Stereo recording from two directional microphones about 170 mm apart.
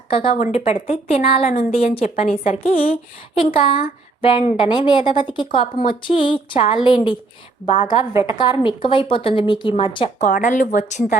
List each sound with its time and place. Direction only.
0.1 s speech: 30° left (ahead or behind)
0.3 s a woman's voice: 45° left (ahead or behind)
7.8 s speech: 45° left (ahead or behind)
8.3 s speech: 30° left (ahead or behind)
10.2 s speech: 50° left (ahead or behind)